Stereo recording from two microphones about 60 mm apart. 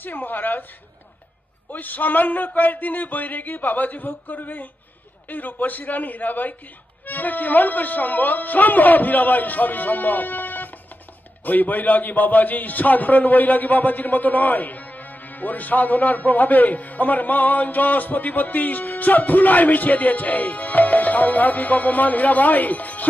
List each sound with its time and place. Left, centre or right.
0.0 s a woman's voice: left
1.7 s a man's voice: left